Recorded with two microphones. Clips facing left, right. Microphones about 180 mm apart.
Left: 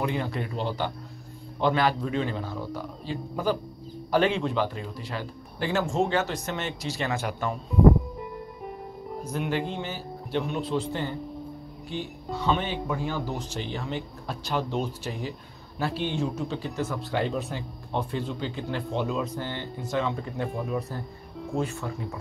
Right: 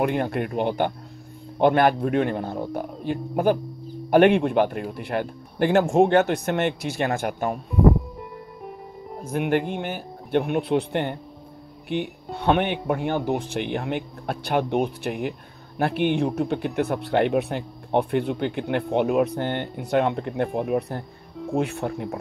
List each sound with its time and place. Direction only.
0.0 s speech: 60° right (ahead or behind)
9.2 s speech: 55° right (ahead or behind)